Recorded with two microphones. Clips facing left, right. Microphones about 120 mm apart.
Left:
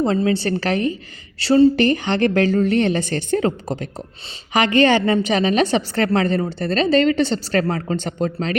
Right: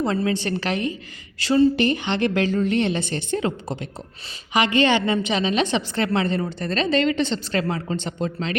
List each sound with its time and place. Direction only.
0.0 s a woman's voice: 30° left (ahead or behind)